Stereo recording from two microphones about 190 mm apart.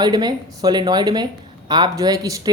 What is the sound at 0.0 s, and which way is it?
A woman's voice, 20° right (ahead or behind).